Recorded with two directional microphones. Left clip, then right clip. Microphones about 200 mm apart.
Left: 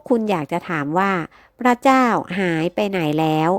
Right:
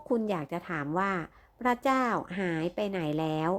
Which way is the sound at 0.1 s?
45° left (ahead or behind).